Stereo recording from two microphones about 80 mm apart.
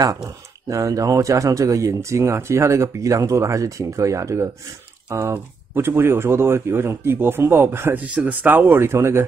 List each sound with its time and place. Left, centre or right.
0.0 s speech: right
5.3 s speech: right